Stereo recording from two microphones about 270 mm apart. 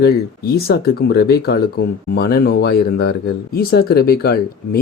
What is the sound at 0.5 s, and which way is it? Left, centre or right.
Speech, left.